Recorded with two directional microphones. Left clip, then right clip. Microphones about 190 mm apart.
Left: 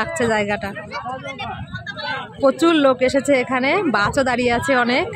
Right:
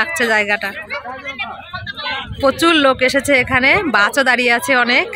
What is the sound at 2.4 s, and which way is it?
Speech, 10° left (ahead or behind).